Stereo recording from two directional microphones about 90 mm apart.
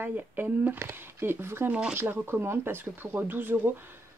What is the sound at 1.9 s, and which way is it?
Speech, 25° right (ahead or behind).